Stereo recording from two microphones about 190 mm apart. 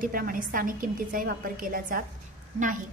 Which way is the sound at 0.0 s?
50° right (ahead or behind).